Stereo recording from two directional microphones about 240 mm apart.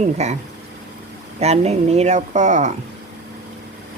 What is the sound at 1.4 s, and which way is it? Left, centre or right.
Speech, right.